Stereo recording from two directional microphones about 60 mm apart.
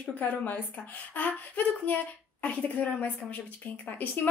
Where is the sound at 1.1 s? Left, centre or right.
Left.